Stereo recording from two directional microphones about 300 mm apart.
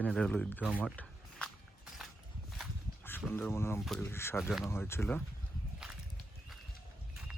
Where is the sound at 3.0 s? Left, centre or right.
Centre.